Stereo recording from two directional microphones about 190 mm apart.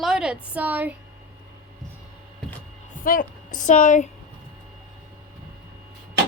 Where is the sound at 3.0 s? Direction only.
45° left (ahead or behind).